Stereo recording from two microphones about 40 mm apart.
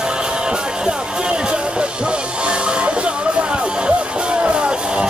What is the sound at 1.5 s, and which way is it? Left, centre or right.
Music, right.